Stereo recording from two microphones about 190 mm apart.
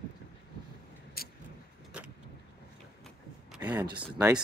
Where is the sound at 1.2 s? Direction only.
55° left (ahead or behind).